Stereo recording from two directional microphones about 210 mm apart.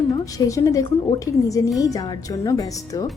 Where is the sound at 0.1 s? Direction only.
15° left (ahead or behind).